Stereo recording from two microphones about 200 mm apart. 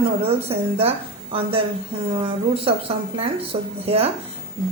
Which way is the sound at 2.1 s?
25° right (ahead or behind).